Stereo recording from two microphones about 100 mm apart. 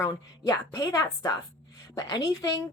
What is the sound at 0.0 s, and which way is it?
A woman's voice, 25° left (ahead or behind).